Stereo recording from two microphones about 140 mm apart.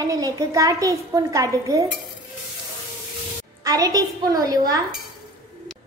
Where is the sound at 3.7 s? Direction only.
25° right (ahead or behind).